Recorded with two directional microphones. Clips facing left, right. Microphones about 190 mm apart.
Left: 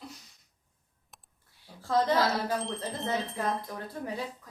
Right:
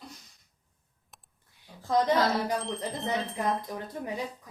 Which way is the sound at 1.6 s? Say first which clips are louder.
Right 1 dB; 15° right (ahead or behind).